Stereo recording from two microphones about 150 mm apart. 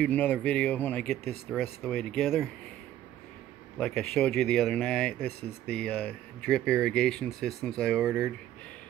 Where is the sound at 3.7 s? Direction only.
5° left (ahead or behind).